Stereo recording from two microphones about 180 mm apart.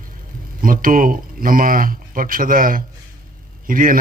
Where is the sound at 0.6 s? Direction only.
50° right (ahead or behind).